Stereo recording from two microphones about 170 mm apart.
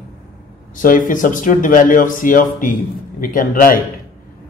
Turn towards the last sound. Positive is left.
turn(degrees=55)  # may be behind; listen again after turning